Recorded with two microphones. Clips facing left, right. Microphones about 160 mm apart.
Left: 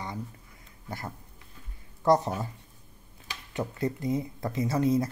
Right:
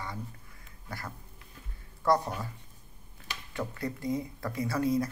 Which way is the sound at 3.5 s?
20° left (ahead or behind).